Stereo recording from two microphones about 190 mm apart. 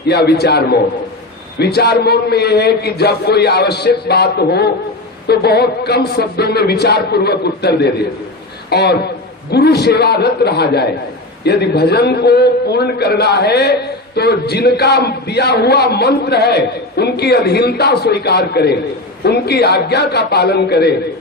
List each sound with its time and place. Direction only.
0.1 s a man's voice: 60° left (ahead or behind)